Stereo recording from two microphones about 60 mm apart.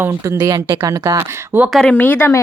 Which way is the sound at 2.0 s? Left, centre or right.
Left.